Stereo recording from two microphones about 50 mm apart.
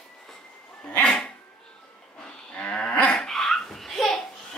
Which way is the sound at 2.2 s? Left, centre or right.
Left.